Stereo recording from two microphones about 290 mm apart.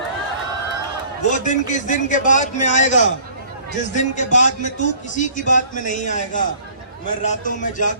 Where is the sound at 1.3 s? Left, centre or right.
Left.